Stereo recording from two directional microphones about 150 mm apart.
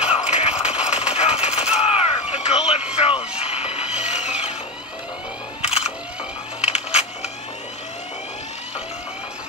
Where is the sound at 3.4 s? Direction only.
40° left (ahead or behind).